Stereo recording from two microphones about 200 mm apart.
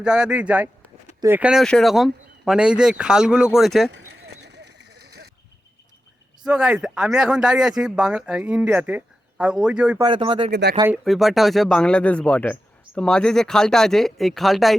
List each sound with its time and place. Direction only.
0.0 s speech: 5° right (ahead or behind)
4.4 s a sound: 55° right (ahead or behind)
6.4 s speech: 5° right (ahead or behind)
10.0 s speech: 25° right (ahead or behind)
10.5 s speech: 55° right (ahead or behind)
10.9 s speech: centre (ahead or behind)